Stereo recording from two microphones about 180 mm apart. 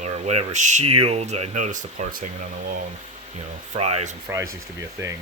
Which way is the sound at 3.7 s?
40° right (ahead or behind).